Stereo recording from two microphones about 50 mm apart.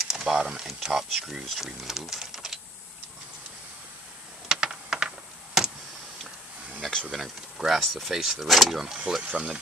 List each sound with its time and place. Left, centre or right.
0.0 s speech: centre
4.5 s a sound: centre
7.1 s speech: centre
8.9 s speech: centre